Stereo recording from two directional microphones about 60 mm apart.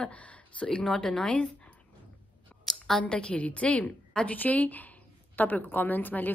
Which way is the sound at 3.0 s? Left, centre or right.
Centre.